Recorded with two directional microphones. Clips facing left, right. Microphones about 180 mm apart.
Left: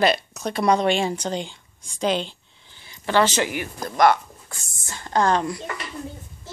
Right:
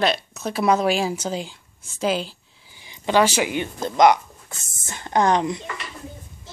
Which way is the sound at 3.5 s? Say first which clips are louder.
Right 3 dB; 20° right (ahead or behind).